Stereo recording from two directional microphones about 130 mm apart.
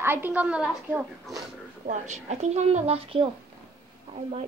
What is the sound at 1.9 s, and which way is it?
A woman's voice, 65° right (ahead or behind).